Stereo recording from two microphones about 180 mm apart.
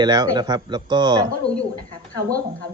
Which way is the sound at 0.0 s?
20° right (ahead or behind).